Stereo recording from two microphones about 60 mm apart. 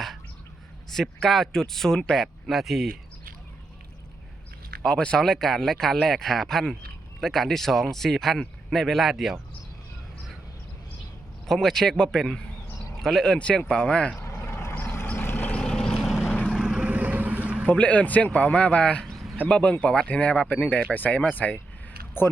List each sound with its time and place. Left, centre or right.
0.9 s speech: centre
2.2 s speech: centre
4.8 s speech: centre
11.4 s a man's voice: centre
14.2 s vehicle: left
15.6 s vehicle: centre
16.0 s vehicle: centre
16.9 s boat: right
17.7 s speech: left
19.1 s a sound: centre
19.5 s a man's voice: centre